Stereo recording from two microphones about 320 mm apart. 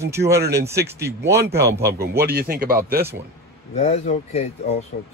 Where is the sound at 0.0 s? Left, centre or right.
Centre.